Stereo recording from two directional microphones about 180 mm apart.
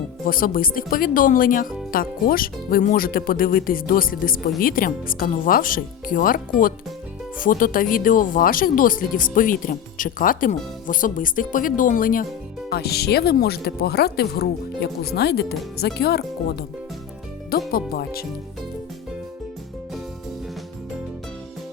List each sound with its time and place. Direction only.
0.3 s speech: 55° left (ahead or behind)
12.7 s speech: 60° left (ahead or behind)
17.7 s speech: 55° left (ahead or behind)